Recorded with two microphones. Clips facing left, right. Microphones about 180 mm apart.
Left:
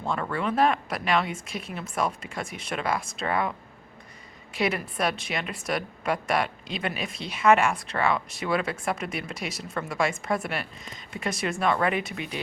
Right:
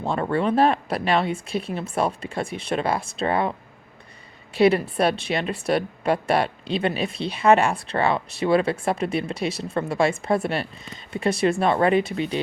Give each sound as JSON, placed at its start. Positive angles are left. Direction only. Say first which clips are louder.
{"t": 0.0, "sound": "a woman's voice", "louder": "right 6 dB", "side_deg": -30}
{"t": 4.5, "sound": "a woman's voice", "louder": "right 9 dB", "side_deg": -30}